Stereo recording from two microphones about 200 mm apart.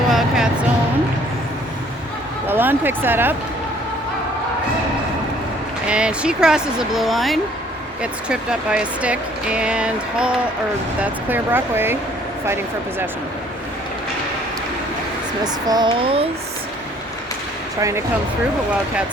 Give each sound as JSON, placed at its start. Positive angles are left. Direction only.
{"t": 0.1, "sound": "a sound", "side_deg": 0}
{"t": 2.5, "sound": "speech", "side_deg": -10}
{"t": 5.9, "sound": "speech", "side_deg": -5}
{"t": 15.4, "sound": "speech", "side_deg": -20}
{"t": 17.7, "sound": "speech", "side_deg": -15}